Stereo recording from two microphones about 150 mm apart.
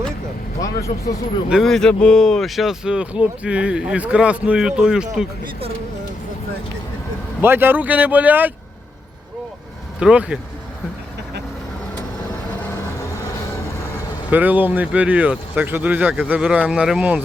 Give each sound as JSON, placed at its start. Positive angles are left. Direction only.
{"t": 0.6, "sound": "speech", "side_deg": 20}
{"t": 1.5, "sound": "speech", "side_deg": 0}
{"t": 7.4, "sound": "speech", "side_deg": -15}
{"t": 10.0, "sound": "speech", "side_deg": -5}
{"t": 14.3, "sound": "speech", "side_deg": -10}